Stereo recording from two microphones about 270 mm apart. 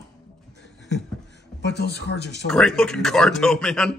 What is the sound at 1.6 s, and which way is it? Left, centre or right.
Speech, left.